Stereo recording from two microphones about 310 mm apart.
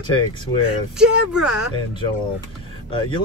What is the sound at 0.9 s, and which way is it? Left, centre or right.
Speech, centre.